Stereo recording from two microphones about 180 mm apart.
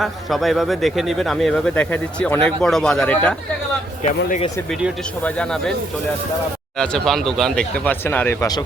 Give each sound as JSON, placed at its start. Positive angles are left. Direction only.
{"t": 0.0, "sound": "speech", "side_deg": 0}
{"t": 4.3, "sound": "speech", "side_deg": 35}
{"t": 4.7, "sound": "speech", "side_deg": 5}
{"t": 6.7, "sound": "speech", "side_deg": 5}